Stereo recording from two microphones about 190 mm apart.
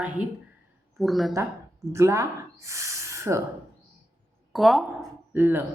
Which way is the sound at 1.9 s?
15° right (ahead or behind).